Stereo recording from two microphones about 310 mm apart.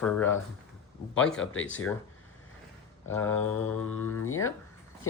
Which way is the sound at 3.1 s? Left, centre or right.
Centre.